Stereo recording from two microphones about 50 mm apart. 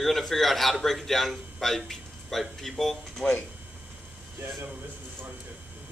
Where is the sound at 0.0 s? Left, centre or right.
Centre.